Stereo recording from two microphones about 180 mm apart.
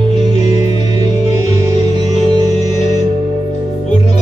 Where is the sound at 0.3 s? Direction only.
40° left (ahead or behind).